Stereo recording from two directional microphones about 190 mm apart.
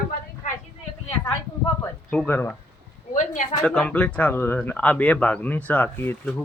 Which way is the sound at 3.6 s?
5° left (ahead or behind).